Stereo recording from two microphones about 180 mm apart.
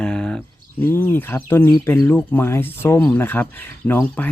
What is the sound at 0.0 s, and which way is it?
Speech, 5° left (ahead or behind).